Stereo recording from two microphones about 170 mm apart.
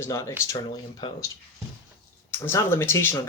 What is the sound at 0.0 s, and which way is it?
Speech, 15° left (ahead or behind).